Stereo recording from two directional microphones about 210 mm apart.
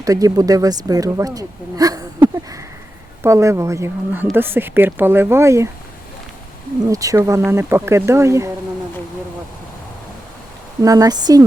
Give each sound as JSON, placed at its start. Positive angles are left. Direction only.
{"t": 0.0, "sound": "speech", "side_deg": -15}
{"t": 6.8, "sound": "speech", "side_deg": -15}
{"t": 10.8, "sound": "speech", "side_deg": -15}